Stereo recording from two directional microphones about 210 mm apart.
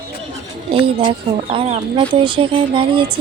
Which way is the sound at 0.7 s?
25° right (ahead or behind).